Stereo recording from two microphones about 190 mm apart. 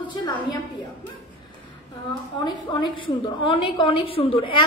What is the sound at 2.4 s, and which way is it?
A woman's voice, 20° left (ahead or behind).